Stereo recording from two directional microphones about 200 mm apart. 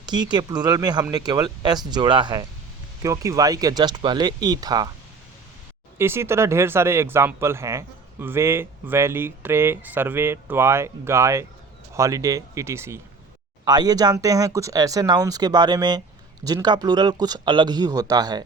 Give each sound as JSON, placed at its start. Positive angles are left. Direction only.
{"t": 0.0, "sound": "speech", "side_deg": -20}
{"t": 6.0, "sound": "speech", "side_deg": -10}